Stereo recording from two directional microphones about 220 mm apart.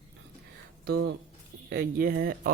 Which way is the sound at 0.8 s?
50° right (ahead or behind).